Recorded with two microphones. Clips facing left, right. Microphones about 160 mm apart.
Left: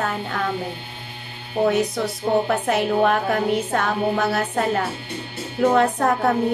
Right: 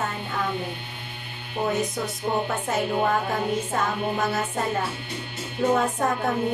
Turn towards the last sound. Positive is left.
turn(degrees=75)  # may be behind; listen again after turning